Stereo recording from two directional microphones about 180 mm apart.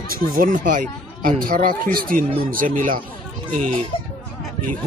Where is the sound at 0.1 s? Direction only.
50° right (ahead or behind).